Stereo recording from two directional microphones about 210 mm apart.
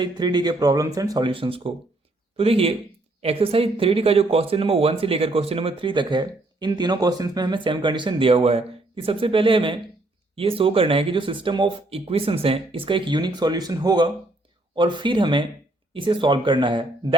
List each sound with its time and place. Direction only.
0.0 s speech: 20° right (ahead or behind)